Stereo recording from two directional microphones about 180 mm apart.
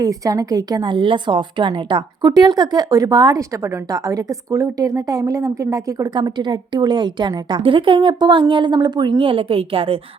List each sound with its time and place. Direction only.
0.0 s a woman's voice: 20° right (ahead or behind)